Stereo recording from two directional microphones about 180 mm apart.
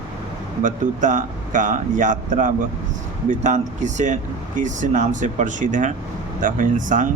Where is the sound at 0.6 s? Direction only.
45° right (ahead or behind).